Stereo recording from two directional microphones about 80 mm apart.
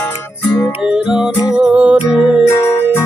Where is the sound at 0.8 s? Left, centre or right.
Centre.